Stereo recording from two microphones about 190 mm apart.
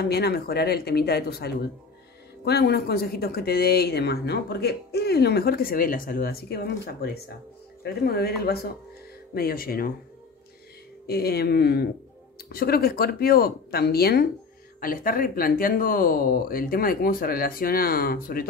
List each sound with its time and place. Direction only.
0.0 s speech: 55° left (ahead or behind)
9.3 s speech: 50° left (ahead or behind)
11.1 s speech: 55° left (ahead or behind)